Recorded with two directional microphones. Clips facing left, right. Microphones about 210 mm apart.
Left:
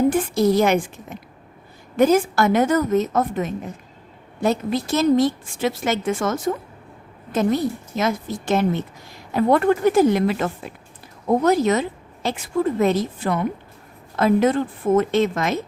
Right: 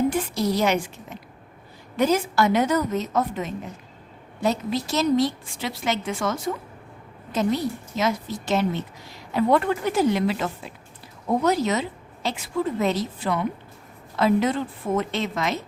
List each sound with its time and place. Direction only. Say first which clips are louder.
0.1 s a woman's voice: left 6 dB; 50° left (ahead or behind)